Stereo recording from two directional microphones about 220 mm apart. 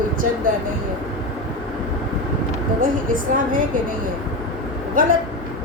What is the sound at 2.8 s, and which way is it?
Speech, 40° right (ahead or behind).